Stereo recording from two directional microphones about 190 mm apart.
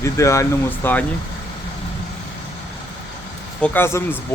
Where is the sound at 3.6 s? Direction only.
10° left (ahead or behind).